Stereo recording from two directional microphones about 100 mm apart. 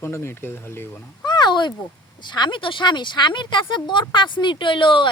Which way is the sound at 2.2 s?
50° left (ahead or behind).